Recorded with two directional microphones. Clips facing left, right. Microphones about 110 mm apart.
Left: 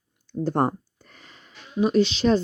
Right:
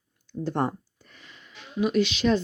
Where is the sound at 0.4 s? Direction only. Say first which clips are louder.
Left 4 dB; 40° left (ahead or behind).